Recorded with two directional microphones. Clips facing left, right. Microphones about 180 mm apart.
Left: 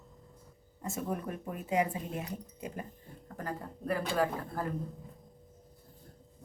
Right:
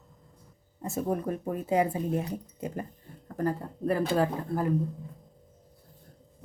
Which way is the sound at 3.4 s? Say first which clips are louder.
Right 10 dB; 30° right (ahead or behind).